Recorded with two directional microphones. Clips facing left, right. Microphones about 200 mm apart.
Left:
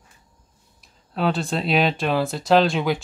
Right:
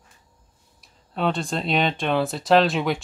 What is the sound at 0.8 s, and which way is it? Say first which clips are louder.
Speech: left 1 dB; centre (ahead or behind).